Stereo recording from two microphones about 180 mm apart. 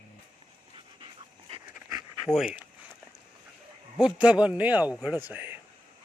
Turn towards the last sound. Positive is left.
turn(degrees=-10)  # may be behind; listen again after turning